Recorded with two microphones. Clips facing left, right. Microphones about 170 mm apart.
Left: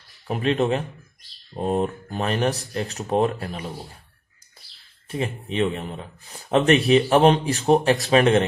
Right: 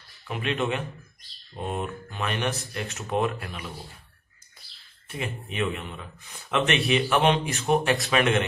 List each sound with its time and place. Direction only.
0.3 s speech: 35° left (ahead or behind)
5.0 s speech: 30° left (ahead or behind)